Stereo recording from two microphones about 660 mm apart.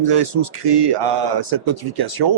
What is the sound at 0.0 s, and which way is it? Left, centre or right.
Speech, right.